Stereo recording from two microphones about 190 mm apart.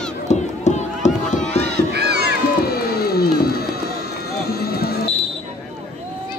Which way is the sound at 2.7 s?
55° left (ahead or behind).